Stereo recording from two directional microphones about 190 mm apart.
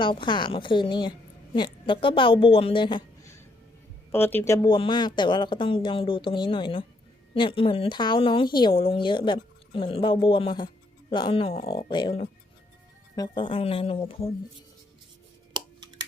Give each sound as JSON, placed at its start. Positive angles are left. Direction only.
{"t": 0.0, "sound": "a woman's voice", "side_deg": 25}